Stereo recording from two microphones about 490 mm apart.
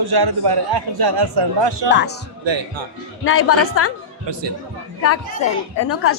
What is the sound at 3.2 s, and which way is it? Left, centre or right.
Speech, left.